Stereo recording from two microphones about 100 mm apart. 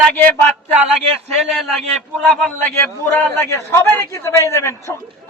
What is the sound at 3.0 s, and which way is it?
A man's voice, 20° left (ahead or behind).